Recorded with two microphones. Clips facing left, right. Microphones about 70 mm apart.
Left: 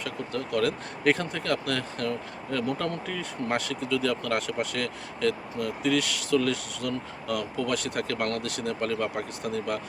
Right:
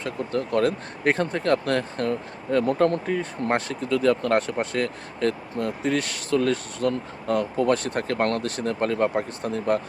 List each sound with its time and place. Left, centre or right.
0.0 s speech: right